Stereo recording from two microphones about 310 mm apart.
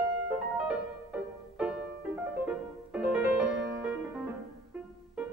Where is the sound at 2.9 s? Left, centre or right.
Centre.